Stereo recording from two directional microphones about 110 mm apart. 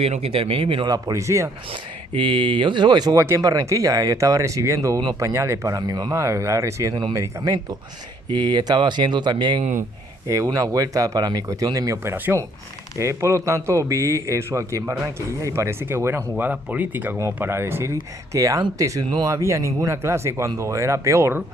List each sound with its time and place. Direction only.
0.0 s speech: 60° right (ahead or behind)
0.9 s a man's voice: 35° right (ahead or behind)
1.7 s speech: 45° right (ahead or behind)
3.2 s a man's voice: 20° right (ahead or behind)
3.4 s a man's voice: 30° right (ahead or behind)
10.2 s speech: 30° right (ahead or behind)
12.1 s a man's voice: 15° right (ahead or behind)